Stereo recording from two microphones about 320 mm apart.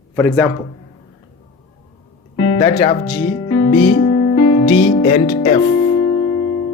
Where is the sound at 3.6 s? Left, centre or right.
Left.